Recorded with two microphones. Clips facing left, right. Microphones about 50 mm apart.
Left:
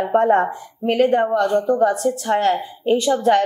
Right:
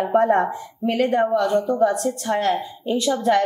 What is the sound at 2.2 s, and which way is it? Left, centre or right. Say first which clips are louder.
A woman's voice: left 3 dB; left.